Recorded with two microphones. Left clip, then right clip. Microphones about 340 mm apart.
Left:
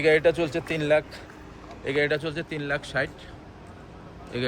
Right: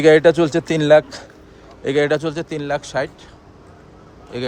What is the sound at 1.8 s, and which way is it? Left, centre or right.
A man's voice, centre.